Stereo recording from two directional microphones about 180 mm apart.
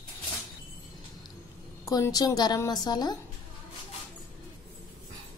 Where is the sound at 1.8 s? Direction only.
20° left (ahead or behind).